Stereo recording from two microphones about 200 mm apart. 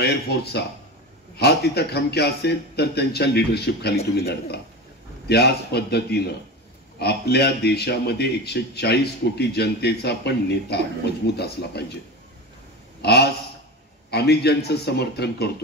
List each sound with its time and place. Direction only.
0.0 s a man's voice: 55° left (ahead or behind)
13.0 s a man's voice: 55° left (ahead or behind)